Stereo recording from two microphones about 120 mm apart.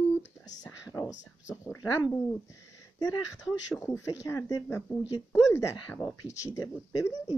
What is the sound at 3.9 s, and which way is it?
Speech, 25° left (ahead or behind).